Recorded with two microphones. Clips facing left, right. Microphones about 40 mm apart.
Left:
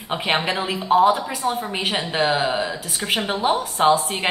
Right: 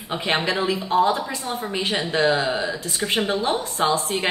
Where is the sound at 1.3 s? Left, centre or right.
Left.